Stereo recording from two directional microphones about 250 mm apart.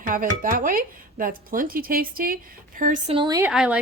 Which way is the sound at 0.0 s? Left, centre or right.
Right.